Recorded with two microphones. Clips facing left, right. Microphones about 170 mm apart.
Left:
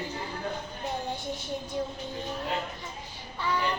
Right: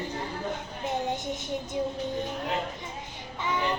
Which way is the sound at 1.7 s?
15° right (ahead or behind).